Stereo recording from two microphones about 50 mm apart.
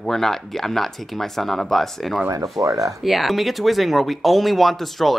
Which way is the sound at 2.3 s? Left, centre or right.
Right.